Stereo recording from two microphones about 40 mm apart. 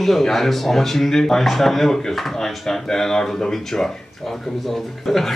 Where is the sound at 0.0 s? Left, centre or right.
Centre.